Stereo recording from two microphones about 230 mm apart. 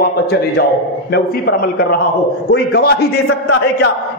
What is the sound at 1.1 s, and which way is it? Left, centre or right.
A man's voice, left.